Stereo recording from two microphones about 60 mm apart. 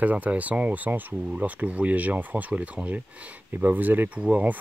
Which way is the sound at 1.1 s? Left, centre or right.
Centre.